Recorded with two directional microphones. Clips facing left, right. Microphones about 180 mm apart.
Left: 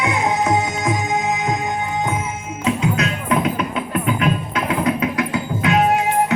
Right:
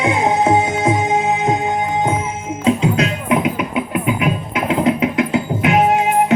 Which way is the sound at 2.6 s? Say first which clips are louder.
Right 4 dB; 30° right (ahead or behind).